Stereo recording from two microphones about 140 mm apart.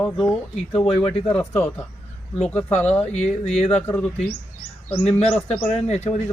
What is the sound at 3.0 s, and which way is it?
Speech, 50° left (ahead or behind).